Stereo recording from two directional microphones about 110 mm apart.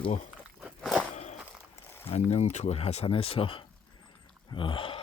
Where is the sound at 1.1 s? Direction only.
90° left.